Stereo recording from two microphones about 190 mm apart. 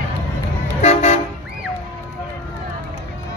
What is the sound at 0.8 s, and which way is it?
Toot, 35° left (ahead or behind).